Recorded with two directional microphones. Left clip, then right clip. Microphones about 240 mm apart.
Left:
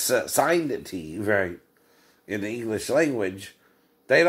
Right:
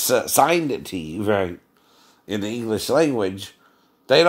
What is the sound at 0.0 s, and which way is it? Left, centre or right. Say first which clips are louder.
Speech: right 5 dB; right.